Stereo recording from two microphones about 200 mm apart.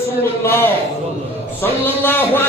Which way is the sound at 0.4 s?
10° left (ahead or behind).